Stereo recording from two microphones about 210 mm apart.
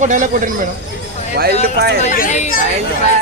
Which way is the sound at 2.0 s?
40° left (ahead or behind).